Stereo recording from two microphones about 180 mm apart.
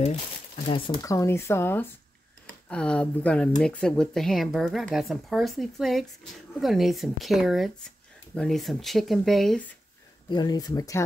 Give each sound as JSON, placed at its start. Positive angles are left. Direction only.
{"t": 0.7, "sound": "speech", "side_deg": 30}
{"t": 1.0, "sound": "speech", "side_deg": 15}
{"t": 10.3, "sound": "speech", "side_deg": 20}